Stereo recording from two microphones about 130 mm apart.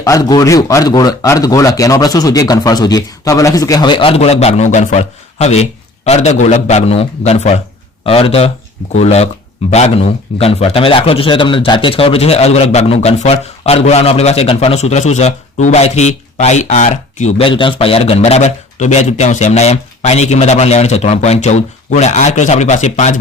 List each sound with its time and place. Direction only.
0.0 s a man's voice: 25° left (ahead or behind); by 7.6 s 60° left (ahead or behind)
8.0 s speech: 45° left (ahead or behind); by 17.4 s 60° left (ahead or behind)
17.4 s a man's voice: 40° left (ahead or behind); by 23.1 s 65° left (ahead or behind)